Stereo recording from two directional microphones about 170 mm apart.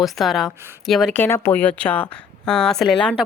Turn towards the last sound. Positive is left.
turn(degrees=5)  # may be behind; listen again after turning